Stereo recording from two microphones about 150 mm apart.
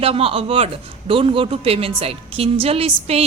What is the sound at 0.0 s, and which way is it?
Speech, 40° right (ahead or behind).